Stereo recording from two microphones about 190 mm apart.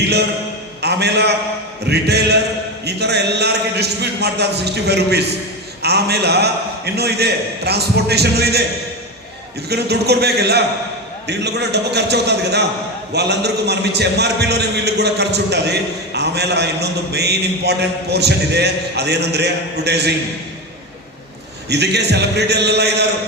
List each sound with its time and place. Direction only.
0.8 s a man's voice: 60° right (ahead or behind)
9.6 s a man's voice: 60° right (ahead or behind)
21.7 s a man's voice: 60° right (ahead or behind)